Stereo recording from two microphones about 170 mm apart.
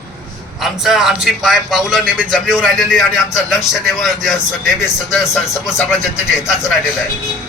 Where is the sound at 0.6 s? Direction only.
Centre (ahead or behind).